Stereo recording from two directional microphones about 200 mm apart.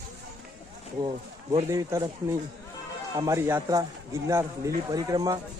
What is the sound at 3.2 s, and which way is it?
Speech, 15° right (ahead or behind).